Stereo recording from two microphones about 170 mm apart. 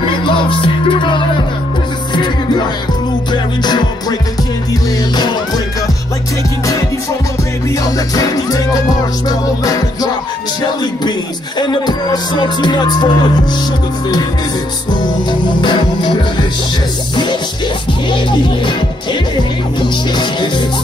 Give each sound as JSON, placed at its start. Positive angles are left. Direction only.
{"t": 0.1, "sound": "music", "side_deg": 30}
{"t": 5.1, "sound": "music", "side_deg": 25}
{"t": 7.8, "sound": "music", "side_deg": 20}
{"t": 15.4, "sound": "music", "side_deg": 25}
{"t": 19.3, "sound": "speech", "side_deg": 25}